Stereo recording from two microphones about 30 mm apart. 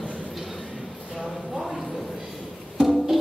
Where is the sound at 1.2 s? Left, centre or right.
Centre.